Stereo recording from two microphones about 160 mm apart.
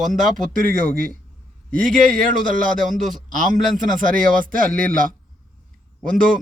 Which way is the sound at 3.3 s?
55° right (ahead or behind).